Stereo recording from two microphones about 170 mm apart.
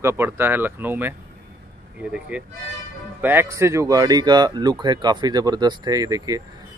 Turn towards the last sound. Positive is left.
turn(degrees=-20)  # may be behind; listen again after turning